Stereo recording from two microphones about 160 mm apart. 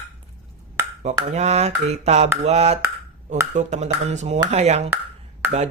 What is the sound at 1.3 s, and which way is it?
Dishes, 45° right (ahead or behind).